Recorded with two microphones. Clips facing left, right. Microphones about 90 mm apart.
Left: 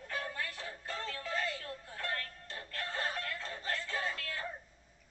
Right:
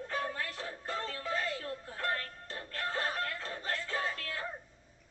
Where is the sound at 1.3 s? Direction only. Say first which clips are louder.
Right 1 dB; 35° right (ahead or behind).